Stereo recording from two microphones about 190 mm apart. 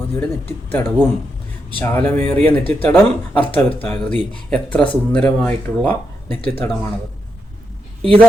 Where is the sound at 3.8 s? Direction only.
5° left (ahead or behind).